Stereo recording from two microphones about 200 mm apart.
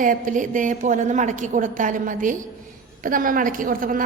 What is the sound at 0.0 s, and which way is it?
A woman's voice, 40° right (ahead or behind).